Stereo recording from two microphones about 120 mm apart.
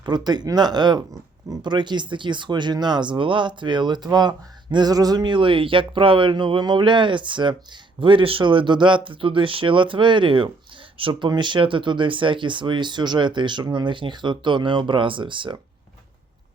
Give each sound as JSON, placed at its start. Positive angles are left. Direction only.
{"t": 0.0, "sound": "speech", "side_deg": -35}